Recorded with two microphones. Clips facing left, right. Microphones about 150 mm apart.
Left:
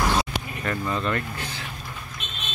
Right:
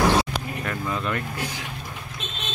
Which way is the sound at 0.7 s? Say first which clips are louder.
Left 3 dB; 5° right (ahead or behind).